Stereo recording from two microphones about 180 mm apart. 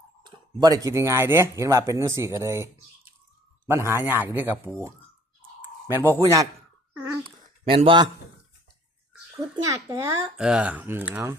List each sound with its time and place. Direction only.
0.2 s speech: 25° right (ahead or behind)
3.7 s speech: 15° right (ahead or behind)
7.3 s speech: 30° right (ahead or behind)
9.4 s speech: 15° right (ahead or behind)
10.3 s speech: 5° right (ahead or behind)